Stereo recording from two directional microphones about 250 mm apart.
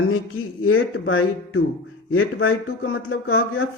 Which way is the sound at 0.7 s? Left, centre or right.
Left.